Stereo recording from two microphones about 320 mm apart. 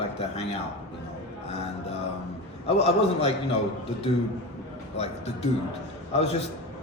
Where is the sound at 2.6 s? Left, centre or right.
Centre.